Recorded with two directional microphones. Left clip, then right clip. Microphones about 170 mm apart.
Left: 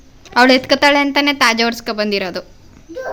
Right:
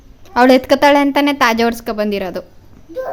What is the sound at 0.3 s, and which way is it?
A woman's voice, 20° right (ahead or behind).